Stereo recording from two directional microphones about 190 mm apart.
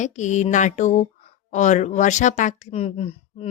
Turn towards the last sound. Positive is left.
turn(degrees=30)  # may be behind; listen again after turning